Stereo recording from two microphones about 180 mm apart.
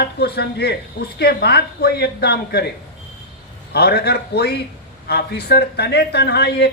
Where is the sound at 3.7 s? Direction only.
65° left (ahead or behind).